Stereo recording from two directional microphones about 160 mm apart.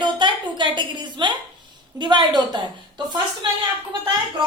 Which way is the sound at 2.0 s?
30° right (ahead or behind).